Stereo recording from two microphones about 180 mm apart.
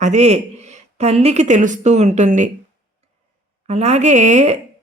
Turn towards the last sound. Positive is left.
turn(degrees=-40)  # may be behind; listen again after turning